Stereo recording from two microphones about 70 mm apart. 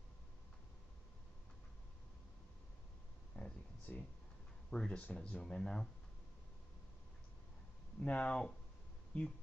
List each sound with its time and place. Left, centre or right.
3.3 s a sound: centre
4.6 s speech: centre
8.0 s speech: centre